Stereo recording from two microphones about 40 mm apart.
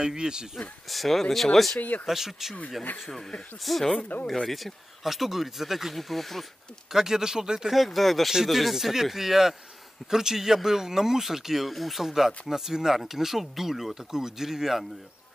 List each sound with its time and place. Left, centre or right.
0.0 s speech: centre
0.6 s speech: centre
1.8 s speech: left
2.0 s speech: centre
3.7 s speech: centre
5.9 s speech: centre
6.9 s speech: centre
7.7 s speech: centre